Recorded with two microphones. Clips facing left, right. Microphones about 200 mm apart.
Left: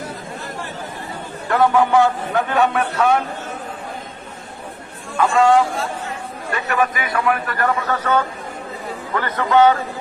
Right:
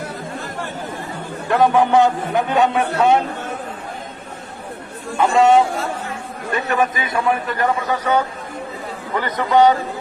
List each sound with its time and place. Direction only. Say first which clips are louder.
1.5 s a man's voice: right 1 dB; 20° right (ahead or behind)
5.1 s a man's voice: right 1 dB; 20° right (ahead or behind)